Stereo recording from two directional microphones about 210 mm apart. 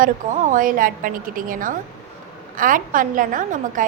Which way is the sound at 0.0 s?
40° right (ahead or behind).